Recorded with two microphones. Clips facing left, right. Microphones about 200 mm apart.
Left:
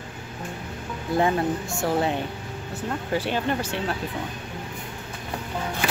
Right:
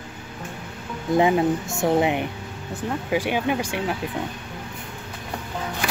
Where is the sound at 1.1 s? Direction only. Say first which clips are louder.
Right 4 dB; 15° right (ahead or behind).